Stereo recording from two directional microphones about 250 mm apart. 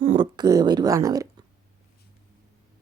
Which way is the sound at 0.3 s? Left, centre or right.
Centre.